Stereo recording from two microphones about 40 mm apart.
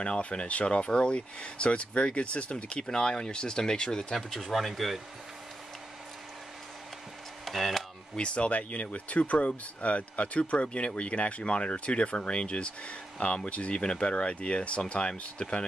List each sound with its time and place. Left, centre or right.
0.0 s speech: left
2.8 s speech: centre
4.4 s speech: centre
7.4 s speech: centre
8.5 s speech: left